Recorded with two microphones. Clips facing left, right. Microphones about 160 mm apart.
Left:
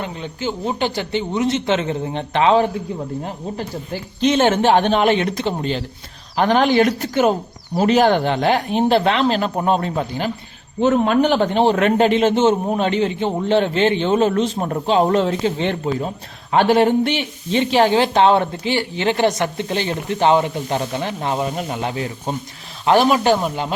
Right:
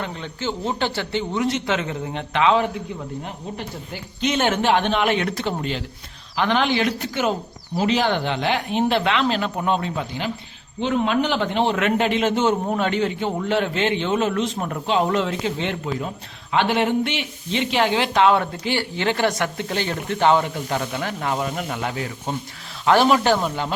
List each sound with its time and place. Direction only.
0.0 s a man's voice: 15° left (ahead or behind); by 2.6 s 35° left (ahead or behind)
4.2 s a man's voice: 30° left (ahead or behind)
6.3 s a man's voice: 40° left (ahead or behind); by 23.7 s 15° left (ahead or behind)